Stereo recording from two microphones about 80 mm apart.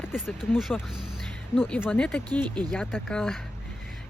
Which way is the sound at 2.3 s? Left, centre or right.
Right.